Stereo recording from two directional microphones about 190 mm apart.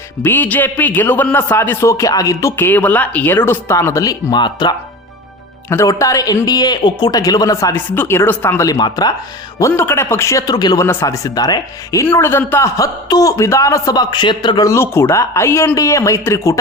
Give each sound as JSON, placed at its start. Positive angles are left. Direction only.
{"t": 0.2, "sound": "a man's voice", "side_deg": 10}